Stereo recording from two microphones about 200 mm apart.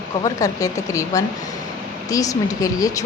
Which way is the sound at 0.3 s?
15° left (ahead or behind).